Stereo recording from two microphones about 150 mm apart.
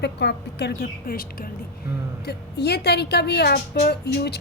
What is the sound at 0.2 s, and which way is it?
Music, 90° left.